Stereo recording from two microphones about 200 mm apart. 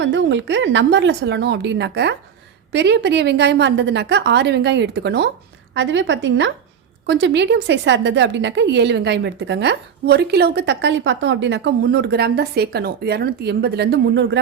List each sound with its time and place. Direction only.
0.0 s a woman's voice: 65° right (ahead or behind)
5.7 s a woman's voice: 65° right (ahead or behind)